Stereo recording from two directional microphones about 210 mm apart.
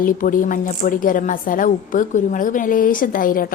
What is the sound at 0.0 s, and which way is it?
A woman's voice, 40° left (ahead or behind).